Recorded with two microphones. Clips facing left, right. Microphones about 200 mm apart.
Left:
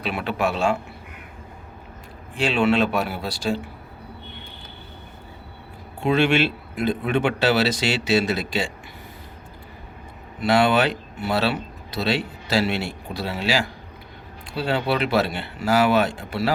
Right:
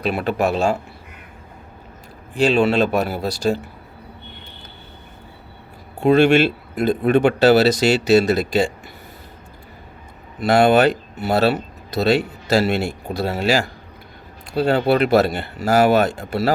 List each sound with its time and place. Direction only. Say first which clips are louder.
0.0 s speech: right 5 dB; 40° right (ahead or behind)
2.3 s speech: right 4 dB; 40° right (ahead or behind)
6.0 s speech: right 6 dB; 45° right (ahead or behind)
10.4 s speech: right 5 dB; 45° right (ahead or behind)